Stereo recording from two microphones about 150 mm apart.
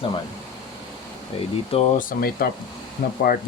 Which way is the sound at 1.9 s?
75° left (ahead or behind).